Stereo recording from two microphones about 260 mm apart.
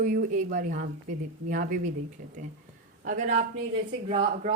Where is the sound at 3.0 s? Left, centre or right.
Right.